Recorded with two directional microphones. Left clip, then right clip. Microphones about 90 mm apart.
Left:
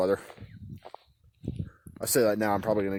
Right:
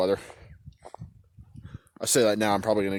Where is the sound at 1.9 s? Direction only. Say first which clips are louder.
Right 2 dB; 30° right (ahead or behind).